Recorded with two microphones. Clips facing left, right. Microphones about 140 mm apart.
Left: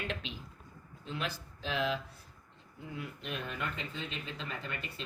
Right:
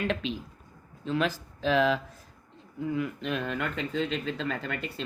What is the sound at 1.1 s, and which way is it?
Speech, 90° right.